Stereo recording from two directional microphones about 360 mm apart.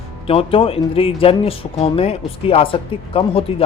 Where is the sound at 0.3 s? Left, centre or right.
Centre.